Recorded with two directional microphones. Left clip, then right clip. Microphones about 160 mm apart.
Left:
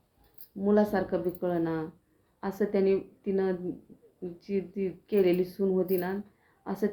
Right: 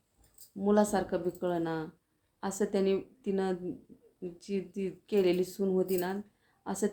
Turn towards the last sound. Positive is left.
turn(degrees=-25)  # may be behind; listen again after turning